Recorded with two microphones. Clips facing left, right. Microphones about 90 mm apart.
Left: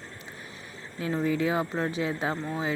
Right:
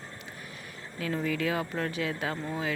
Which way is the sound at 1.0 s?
25° left (ahead or behind).